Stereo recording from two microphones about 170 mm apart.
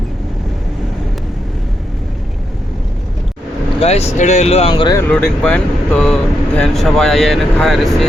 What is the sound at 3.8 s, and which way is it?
Speech, 35° left (ahead or behind).